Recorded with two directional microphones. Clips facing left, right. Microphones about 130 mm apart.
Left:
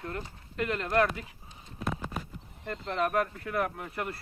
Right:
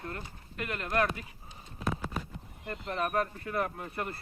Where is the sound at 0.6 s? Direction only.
15° right (ahead or behind).